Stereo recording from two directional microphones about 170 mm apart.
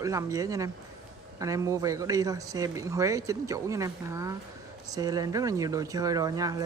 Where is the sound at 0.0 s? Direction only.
20° right (ahead or behind).